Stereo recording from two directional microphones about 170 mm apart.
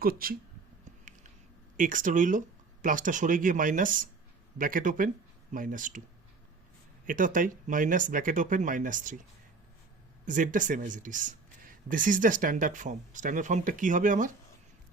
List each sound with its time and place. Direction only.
0.0 s speech: 60° right (ahead or behind)
1.7 s speech: 50° right (ahead or behind)
7.0 s speech: 50° right (ahead or behind)
10.2 s speech: 50° right (ahead or behind)